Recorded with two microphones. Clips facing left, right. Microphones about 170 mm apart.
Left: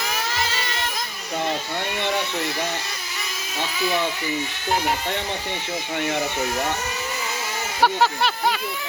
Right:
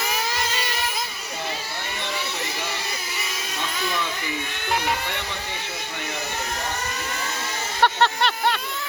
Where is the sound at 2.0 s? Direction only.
60° left (ahead or behind).